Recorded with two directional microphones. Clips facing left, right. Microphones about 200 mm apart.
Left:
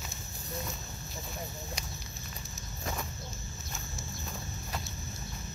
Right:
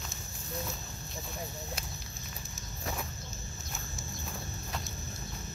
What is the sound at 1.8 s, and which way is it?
Walk, 5° right (ahead or behind).